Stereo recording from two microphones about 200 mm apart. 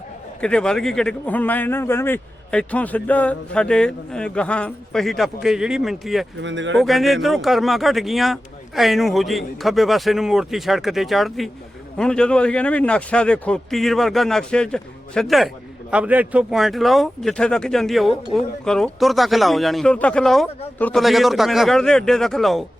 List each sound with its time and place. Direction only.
0.4 s speech: 5° left (ahead or behind)
6.4 s speech: 65° right (ahead or behind)
6.7 s speech: centre (ahead or behind)